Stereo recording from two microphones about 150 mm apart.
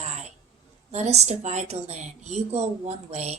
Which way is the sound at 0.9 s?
45° right (ahead or behind).